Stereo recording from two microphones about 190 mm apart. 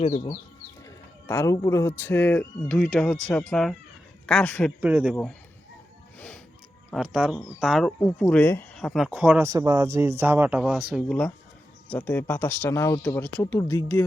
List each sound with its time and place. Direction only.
0.0 s speech: 30° left (ahead or behind)
0.9 s a man's voice: 15° left (ahead or behind)
4.8 s speech: 10° right (ahead or behind)
6.1 s music: 5° left (ahead or behind)
6.9 s speech: 5° right (ahead or behind)
9.5 s speech: 15° right (ahead or behind)
11.9 s a man's voice: 10° left (ahead or behind)